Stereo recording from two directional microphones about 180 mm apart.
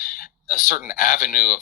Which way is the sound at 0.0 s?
50° left (ahead or behind).